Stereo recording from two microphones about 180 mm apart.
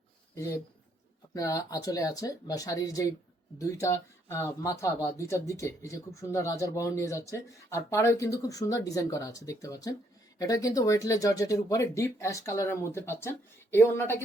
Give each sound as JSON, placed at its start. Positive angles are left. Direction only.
{"t": 0.3, "sound": "speech", "side_deg": 15}